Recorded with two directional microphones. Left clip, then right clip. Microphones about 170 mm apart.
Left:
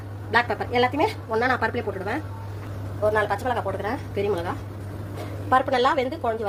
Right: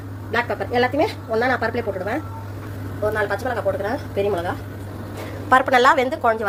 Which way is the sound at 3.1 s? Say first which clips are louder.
Right 1 dB; 35° left (ahead or behind).